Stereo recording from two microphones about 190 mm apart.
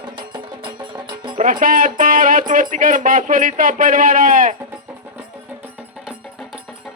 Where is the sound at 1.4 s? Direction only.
45° right (ahead or behind).